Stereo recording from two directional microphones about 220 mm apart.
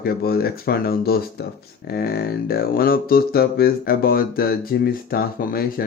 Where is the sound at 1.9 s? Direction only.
45° left (ahead or behind).